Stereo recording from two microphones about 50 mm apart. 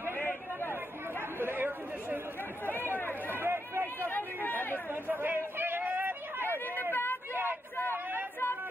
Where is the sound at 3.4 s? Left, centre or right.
Right.